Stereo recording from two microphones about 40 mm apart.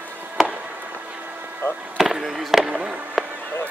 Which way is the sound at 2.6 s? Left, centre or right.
Right.